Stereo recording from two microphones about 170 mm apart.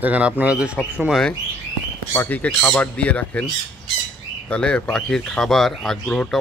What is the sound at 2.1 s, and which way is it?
Speech, 10° left (ahead or behind).